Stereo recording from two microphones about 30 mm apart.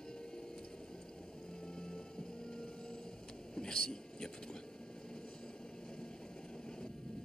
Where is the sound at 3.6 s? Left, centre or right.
Left.